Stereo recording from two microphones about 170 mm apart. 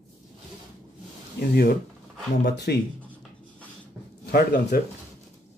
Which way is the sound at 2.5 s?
75° left (ahead or behind).